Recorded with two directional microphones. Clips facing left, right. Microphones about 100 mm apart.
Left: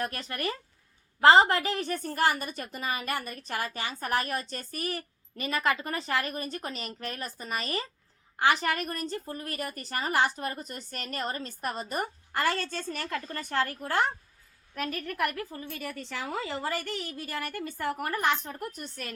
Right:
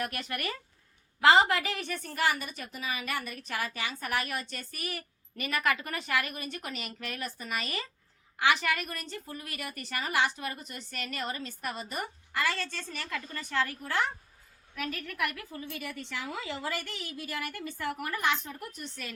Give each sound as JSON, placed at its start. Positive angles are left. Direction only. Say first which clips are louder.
{"t": 0.0, "sound": "a woman's voice", "louder": "left 2 dB", "side_deg": 30}